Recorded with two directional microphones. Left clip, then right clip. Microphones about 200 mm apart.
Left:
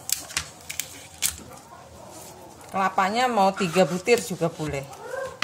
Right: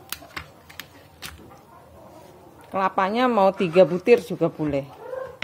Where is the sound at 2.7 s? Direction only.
45° right (ahead or behind).